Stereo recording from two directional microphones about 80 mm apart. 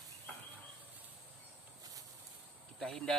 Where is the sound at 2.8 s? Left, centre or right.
Centre.